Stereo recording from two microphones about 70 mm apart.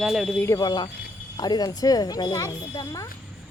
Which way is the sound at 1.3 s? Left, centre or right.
Left.